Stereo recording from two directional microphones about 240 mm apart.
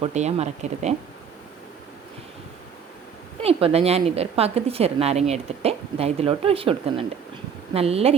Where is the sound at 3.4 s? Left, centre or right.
Right.